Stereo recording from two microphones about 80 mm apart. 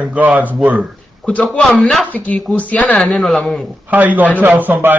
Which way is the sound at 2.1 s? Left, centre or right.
Centre.